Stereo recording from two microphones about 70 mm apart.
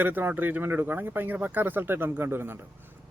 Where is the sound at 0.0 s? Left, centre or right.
Right.